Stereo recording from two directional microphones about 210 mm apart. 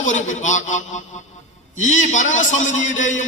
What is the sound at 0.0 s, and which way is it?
A man's voice, 35° left (ahead or behind).